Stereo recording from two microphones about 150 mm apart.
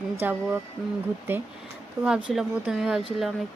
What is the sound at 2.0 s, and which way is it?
Speech, 5° right (ahead or behind).